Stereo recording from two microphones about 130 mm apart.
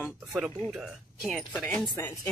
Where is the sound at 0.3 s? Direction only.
5° right (ahead or behind).